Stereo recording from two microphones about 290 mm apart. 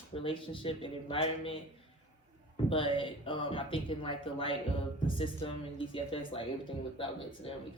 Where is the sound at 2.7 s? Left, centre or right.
Centre.